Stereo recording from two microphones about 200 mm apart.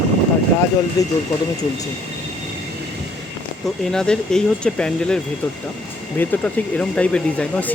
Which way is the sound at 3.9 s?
5° left (ahead or behind).